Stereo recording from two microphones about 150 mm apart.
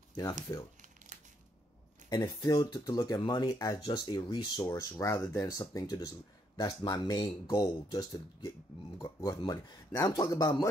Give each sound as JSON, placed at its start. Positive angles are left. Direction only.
{"t": 0.1, "sound": "speech", "side_deg": 25}
{"t": 2.0, "sound": "speech", "side_deg": 25}